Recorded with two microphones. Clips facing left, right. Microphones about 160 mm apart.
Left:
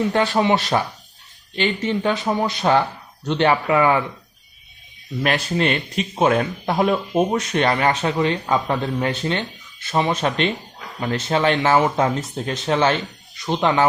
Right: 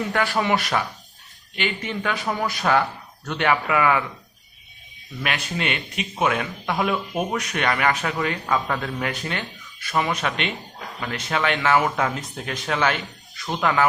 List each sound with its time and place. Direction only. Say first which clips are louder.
0.1 s speech: left 4 dB; 25° left (ahead or behind)
5.2 s speech: left 7 dB; 35° left (ahead or behind)